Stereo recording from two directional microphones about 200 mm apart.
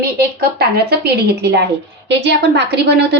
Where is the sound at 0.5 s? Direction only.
50° right (ahead or behind).